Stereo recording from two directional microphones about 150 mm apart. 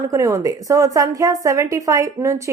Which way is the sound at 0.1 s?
20° right (ahead or behind).